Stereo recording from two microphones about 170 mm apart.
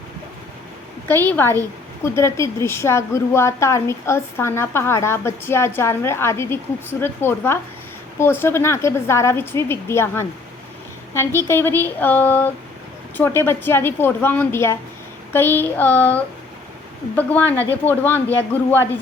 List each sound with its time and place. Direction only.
1.0 s a woman's voice: 10° left (ahead or behind)